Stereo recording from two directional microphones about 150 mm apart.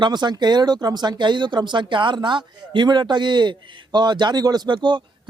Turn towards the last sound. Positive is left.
turn(degrees=-30)  # may be behind; listen again after turning